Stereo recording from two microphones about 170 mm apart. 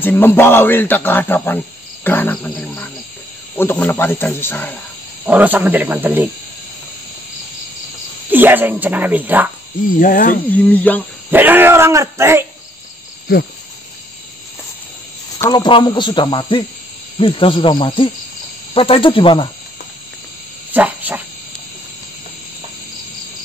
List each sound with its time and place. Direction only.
0.0 s a man's voice: 10° left (ahead or behind)
2.0 s cricket: 10° left (ahead or behind)
3.5 s a man's voice: 10° left (ahead or behind)
5.2 s speech: 10° right (ahead or behind)
8.3 s speech: 10° right (ahead or behind)
9.8 s speech: 55° left (ahead or behind)
10.5 s a man's voice: 10° left (ahead or behind)
11.2 s speech: 10° right (ahead or behind)
15.5 s speech: 25° left (ahead or behind)
17.2 s hoot: 30° left (ahead or behind)
20.7 s speech: 10° right (ahead or behind)